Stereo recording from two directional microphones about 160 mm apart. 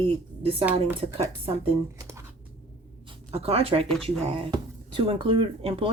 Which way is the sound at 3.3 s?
35° right (ahead or behind).